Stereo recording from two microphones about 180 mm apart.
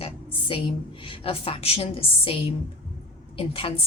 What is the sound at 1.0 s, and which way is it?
Speech, 30° left (ahead or behind).